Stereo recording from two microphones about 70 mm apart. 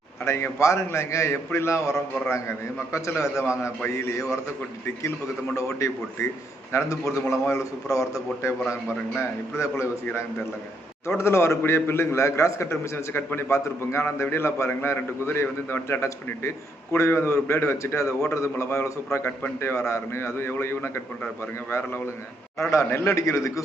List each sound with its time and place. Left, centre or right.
0.3 s a man's voice: left
5.5 s a man's voice: left
9.6 s a man's voice: left
11.2 s a man's voice: left
22.7 s a man's voice: left